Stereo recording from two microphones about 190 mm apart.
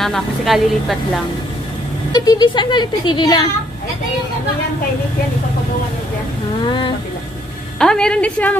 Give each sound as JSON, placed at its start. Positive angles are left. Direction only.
{"t": 0.0, "sound": "a woman's voice", "side_deg": 0}
{"t": 2.1, "sound": "speech", "side_deg": 20}
{"t": 7.8, "sound": "a woman's voice", "side_deg": 5}